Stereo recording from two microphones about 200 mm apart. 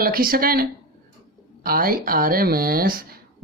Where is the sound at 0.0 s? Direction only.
45° right (ahead or behind).